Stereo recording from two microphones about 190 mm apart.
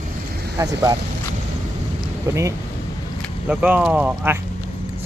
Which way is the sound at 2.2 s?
15° right (ahead or behind).